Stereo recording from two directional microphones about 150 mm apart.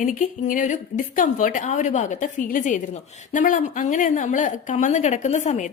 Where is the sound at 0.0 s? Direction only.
60° left (ahead or behind).